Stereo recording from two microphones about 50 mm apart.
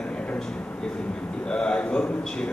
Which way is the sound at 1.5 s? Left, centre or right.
Centre.